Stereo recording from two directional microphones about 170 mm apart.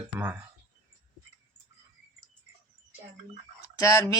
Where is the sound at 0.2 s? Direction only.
10° right (ahead or behind).